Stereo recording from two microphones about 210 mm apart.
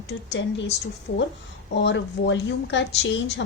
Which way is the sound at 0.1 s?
55° left (ahead or behind).